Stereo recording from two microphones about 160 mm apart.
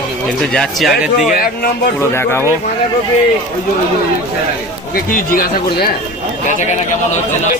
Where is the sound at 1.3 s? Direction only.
65° left (ahead or behind).